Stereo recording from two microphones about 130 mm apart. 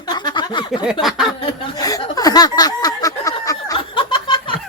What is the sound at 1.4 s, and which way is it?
Chuckle, 45° left (ahead or behind).